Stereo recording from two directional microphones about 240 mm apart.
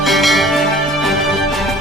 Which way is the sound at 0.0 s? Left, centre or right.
Centre.